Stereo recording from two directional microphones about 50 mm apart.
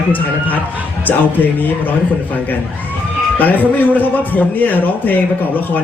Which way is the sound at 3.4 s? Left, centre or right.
Left.